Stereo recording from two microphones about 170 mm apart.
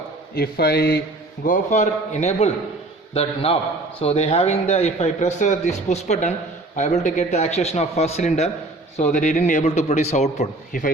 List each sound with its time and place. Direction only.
0.3 s a man's voice: 65° left (ahead or behind)
1.5 s a man's voice: 45° left (ahead or behind)